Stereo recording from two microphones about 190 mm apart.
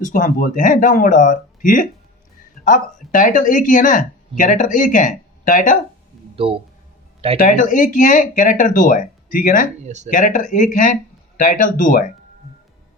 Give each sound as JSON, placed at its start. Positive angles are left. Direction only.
{"t": 0.0, "sound": "speech", "side_deg": 45}
{"t": 6.3, "sound": "speech", "side_deg": -30}
{"t": 7.3, "sound": "speech", "side_deg": 45}
{"t": 9.8, "sound": "speech", "side_deg": -35}
{"t": 10.1, "sound": "speech", "side_deg": 45}